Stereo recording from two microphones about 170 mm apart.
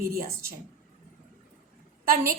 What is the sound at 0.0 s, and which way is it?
Speech, 60° right (ahead or behind).